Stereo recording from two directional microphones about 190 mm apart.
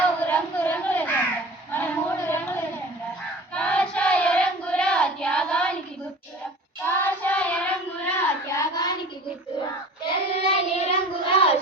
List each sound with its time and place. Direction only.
0.2 s a sound: 10° left (ahead or behind)
3.5 s child singing: 5° left (ahead or behind)
6.8 s child singing: 10° left (ahead or behind)
10.0 s child singing: 30° left (ahead or behind)